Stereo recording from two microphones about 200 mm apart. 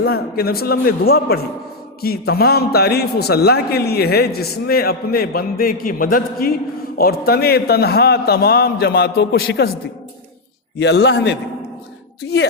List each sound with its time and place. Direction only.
0.0 s a man's voice: 50° left (ahead or behind)
10.8 s a man's voice: 60° left (ahead or behind)